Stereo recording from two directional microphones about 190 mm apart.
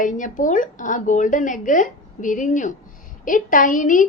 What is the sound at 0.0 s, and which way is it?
A woman's voice, 45° left (ahead or behind).